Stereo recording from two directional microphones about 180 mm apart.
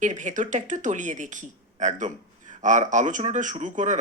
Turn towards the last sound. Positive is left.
turn(degrees=-40)  # may be behind; listen again after turning